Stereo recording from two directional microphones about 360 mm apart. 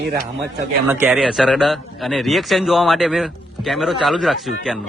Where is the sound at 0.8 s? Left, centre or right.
Centre.